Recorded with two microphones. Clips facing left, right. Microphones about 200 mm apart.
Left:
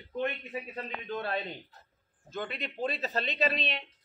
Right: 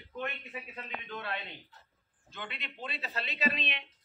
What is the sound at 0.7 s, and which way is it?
A man's voice, 40° left (ahead or behind).